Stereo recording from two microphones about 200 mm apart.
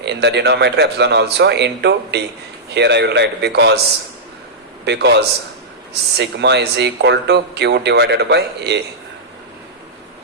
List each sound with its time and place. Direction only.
0.0 s speech: 60° right (ahead or behind)
4.9 s speech: 60° right (ahead or behind)